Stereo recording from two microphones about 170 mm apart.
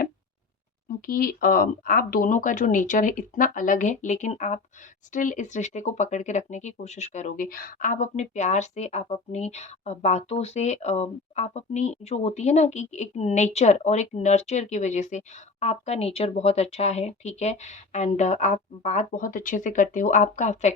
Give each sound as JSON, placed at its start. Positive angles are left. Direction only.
{"t": 1.0, "sound": "speech", "side_deg": 55}